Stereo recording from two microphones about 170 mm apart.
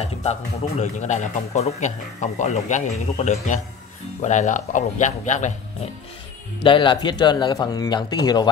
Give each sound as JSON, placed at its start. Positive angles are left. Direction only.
{"t": 0.0, "sound": "speech", "side_deg": 40}
{"t": 6.6, "sound": "speech", "side_deg": 30}